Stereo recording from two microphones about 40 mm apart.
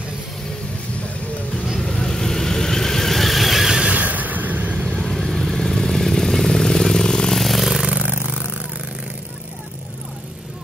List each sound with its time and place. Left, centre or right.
2.0 s vehicle: centre
3.9 s vehicle: right
5.0 s vehicle: centre
7.3 s vehicle: centre
7.9 s a sound: right